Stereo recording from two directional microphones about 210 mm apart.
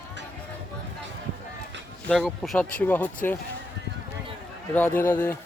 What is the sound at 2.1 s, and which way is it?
Speech, centre (ahead or behind).